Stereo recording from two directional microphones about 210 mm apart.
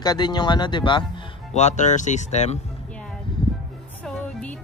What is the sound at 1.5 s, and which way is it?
Speech, 35° left (ahead or behind).